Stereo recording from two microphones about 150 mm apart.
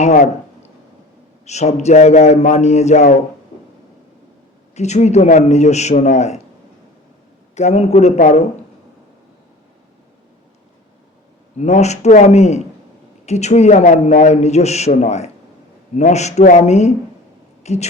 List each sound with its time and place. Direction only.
0.0 s a sound: 50° left (ahead or behind)
1.5 s a man's voice: 50° left (ahead or behind)
4.7 s a man's voice: 50° left (ahead or behind)
7.5 s a man's voice: 45° left (ahead or behind)
11.5 s a man's voice: 50° left (ahead or behind)